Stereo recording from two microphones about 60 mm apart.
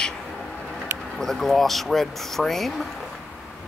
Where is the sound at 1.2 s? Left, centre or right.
Centre.